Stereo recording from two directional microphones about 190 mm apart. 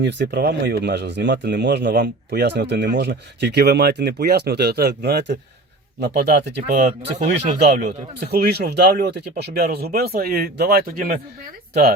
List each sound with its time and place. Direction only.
0.0 s speech: 65° right (ahead or behind)
6.7 s speech: 45° right (ahead or behind)